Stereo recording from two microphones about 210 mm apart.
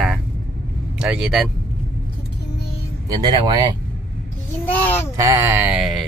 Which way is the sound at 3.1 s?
20° right (ahead or behind).